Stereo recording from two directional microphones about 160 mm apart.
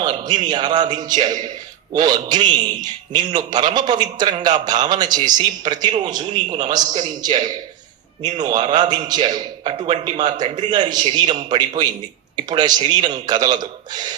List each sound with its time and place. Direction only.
0.0 s a man's voice: 25° right (ahead or behind)